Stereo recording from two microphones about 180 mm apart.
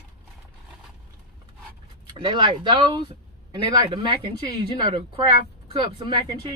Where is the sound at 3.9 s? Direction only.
25° right (ahead or behind).